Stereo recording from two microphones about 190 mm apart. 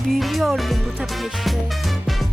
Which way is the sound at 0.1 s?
Centre (ahead or behind).